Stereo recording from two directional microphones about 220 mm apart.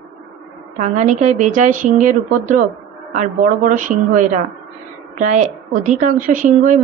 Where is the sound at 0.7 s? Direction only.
30° right (ahead or behind).